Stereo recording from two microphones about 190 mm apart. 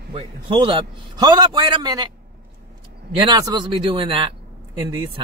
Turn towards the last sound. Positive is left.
turn(degrees=-25)  # may be behind; listen again after turning